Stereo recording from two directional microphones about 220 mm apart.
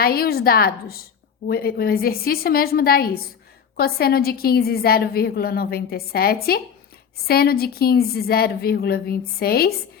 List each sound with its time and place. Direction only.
0.0 s a woman's voice: 45° left (ahead or behind)